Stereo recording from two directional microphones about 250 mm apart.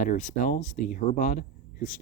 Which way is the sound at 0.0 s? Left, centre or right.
Left.